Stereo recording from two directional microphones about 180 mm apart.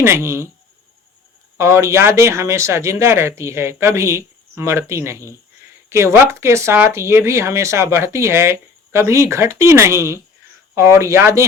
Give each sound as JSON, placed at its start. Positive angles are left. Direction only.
{"t": 0.0, "sound": "speech", "side_deg": -15}
{"t": 1.5, "sound": "speech", "side_deg": -15}